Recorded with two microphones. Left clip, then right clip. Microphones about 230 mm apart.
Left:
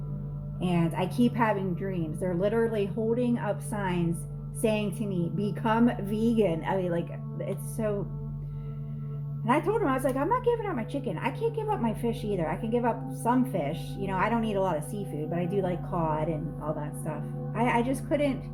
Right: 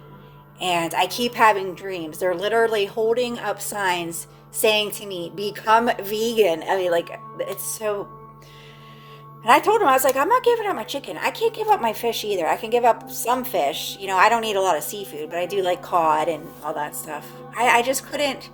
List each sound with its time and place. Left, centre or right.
0.6 s a woman's voice: right
9.4 s a woman's voice: right